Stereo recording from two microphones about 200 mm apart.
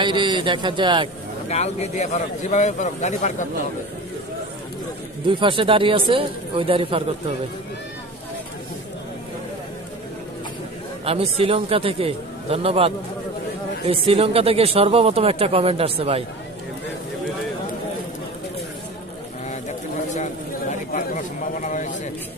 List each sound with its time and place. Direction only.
0.0 s speech: 25° right (ahead or behind)
1.5 s a man's voice: 35° left (ahead or behind)
5.3 s speech: 25° right (ahead or behind)
11.0 s speech: 30° right (ahead or behind)
20.9 s a sound: 40° left (ahead or behind)